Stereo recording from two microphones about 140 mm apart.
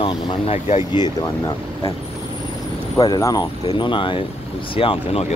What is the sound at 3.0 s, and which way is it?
Speech, 30° left (ahead or behind).